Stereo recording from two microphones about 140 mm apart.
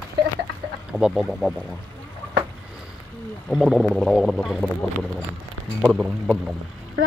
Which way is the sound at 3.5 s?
Centre (ahead or behind).